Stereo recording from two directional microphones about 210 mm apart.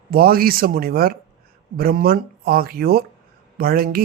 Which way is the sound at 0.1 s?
45° right (ahead or behind).